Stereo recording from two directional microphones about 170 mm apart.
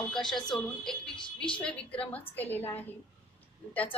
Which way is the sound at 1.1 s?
30° left (ahead or behind).